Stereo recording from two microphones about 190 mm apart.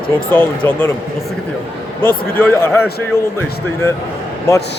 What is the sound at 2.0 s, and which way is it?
Speech, 10° left (ahead or behind).